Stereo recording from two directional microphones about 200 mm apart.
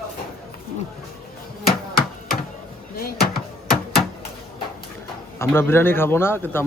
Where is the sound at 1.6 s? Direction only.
50° left (ahead or behind).